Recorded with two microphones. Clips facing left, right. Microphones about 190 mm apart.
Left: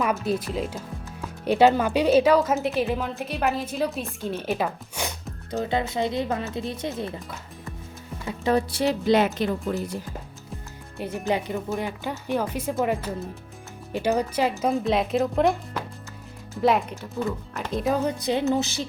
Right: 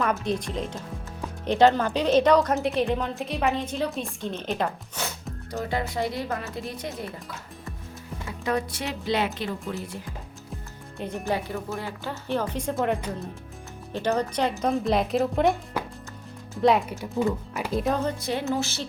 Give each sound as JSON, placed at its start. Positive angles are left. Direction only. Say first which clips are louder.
{"t": 0.0, "sound": "speech", "louder": "left 1 dB", "side_deg": 5}
{"t": 5.6, "sound": "speech", "louder": "left 2 dB", "side_deg": 25}
{"t": 8.4, "sound": "speech", "louder": "left 6 dB", "side_deg": 35}
{"t": 11.3, "sound": "a woman's voice", "louder": "left 3 dB", "side_deg": 20}
{"t": 13.9, "sound": "speech", "louder": "left 2 dB", "side_deg": 10}
{"t": 16.6, "sound": "speech", "louder": "right 1 dB", "side_deg": 0}
{"t": 17.0, "sound": "speech", "louder": "right 3 dB", "side_deg": -10}
{"t": 17.9, "sound": "a woman's voice", "louder": "left 3 dB", "side_deg": 15}